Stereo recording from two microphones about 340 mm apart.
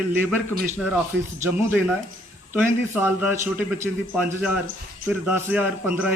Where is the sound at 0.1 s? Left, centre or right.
Centre.